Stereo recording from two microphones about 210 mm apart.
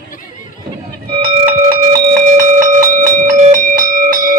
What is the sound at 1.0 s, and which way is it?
Music, 25° right (ahead or behind).